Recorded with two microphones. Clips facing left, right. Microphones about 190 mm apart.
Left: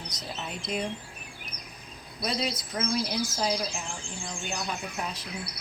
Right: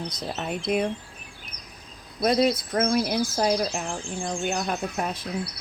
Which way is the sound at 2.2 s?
55° right (ahead or behind).